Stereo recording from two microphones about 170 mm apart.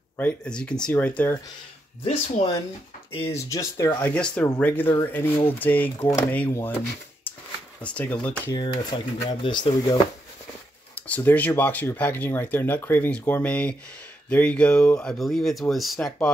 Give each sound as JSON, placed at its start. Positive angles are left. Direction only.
{"t": 0.2, "sound": "speech", "side_deg": 5}
{"t": 2.0, "sound": "speech", "side_deg": 40}
{"t": 3.3, "sound": "speech", "side_deg": 20}
{"t": 7.8, "sound": "speech", "side_deg": 10}
{"t": 8.5, "sound": "speech", "side_deg": 25}
{"t": 11.1, "sound": "speech", "side_deg": 10}